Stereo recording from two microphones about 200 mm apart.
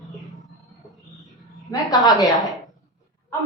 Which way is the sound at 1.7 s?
20° left (ahead or behind).